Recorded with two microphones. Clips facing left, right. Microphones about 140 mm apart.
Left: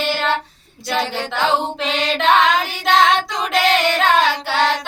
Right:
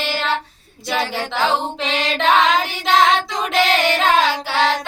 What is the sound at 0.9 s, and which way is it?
A capella, 5° right (ahead or behind).